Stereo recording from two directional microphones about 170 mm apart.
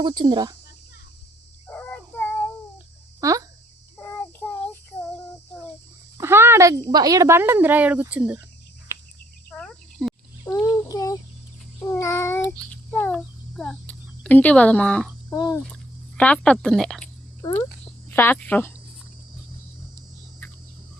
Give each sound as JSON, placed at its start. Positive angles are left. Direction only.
{"t": 0.0, "sound": "speech", "side_deg": -25}
{"t": 1.6, "sound": "child singing", "side_deg": 15}
{"t": 3.2, "sound": "speech", "side_deg": -20}
{"t": 4.0, "sound": "child singing", "side_deg": 15}
{"t": 6.1, "sound": "speech", "side_deg": -15}
{"t": 9.5, "sound": "cricket", "side_deg": 5}
{"t": 10.4, "sound": "child singing", "side_deg": 20}
{"t": 11.9, "sound": "a sound", "side_deg": 20}
{"t": 15.5, "sound": "speech", "side_deg": 5}
{"t": 18.1, "sound": "speech", "side_deg": 10}